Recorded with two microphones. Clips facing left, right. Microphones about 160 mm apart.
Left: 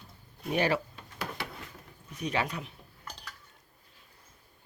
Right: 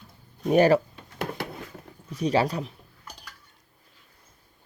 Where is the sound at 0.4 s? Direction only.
45° right (ahead or behind).